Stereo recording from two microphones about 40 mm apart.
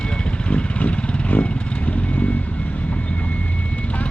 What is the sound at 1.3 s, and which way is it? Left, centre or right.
Vehicle, left.